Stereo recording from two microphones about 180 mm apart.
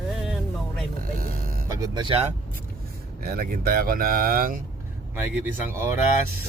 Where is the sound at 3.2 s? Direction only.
55° right (ahead or behind).